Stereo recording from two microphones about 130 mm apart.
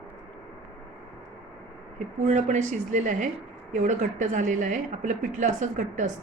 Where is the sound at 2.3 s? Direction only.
65° right (ahead or behind).